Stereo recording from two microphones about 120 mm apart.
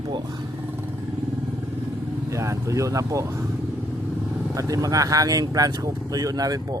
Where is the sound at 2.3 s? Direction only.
25° right (ahead or behind).